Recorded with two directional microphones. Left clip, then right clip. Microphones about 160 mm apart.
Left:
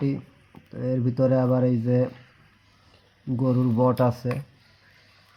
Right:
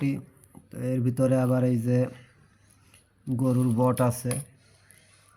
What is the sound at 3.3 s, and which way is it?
Speech, 15° left (ahead or behind).